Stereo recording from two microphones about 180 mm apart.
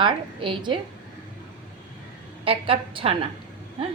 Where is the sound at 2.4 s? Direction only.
30° right (ahead or behind).